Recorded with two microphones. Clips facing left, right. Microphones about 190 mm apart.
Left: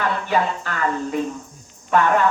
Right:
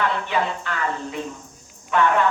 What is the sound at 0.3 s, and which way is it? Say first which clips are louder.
Speech: left 3 dB; 45° left (ahead or behind).